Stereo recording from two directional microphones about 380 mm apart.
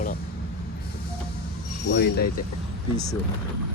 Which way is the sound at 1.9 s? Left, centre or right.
Left.